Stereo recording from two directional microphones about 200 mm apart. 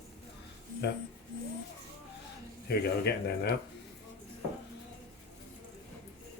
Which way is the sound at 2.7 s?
55° left (ahead or behind).